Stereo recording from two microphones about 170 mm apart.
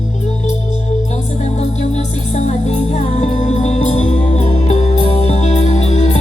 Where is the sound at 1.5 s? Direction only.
40° left (ahead or behind).